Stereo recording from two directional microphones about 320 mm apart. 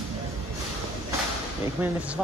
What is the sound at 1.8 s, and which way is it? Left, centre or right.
Speech, centre.